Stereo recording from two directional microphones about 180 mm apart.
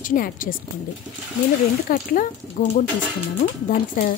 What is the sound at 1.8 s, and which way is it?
Speech, 50° left (ahead or behind).